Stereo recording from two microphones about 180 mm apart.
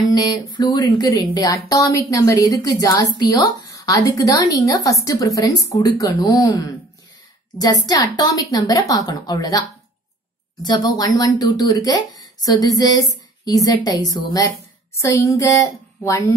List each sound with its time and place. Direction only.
0.1 s a woman's voice: 20° left (ahead or behind)